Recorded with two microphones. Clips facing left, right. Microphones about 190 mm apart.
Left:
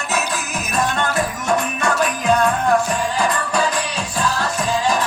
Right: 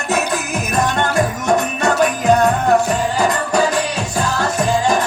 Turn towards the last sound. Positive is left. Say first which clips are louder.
# right 3 dB
turn(degrees=-50)  # may be behind; listen again after turning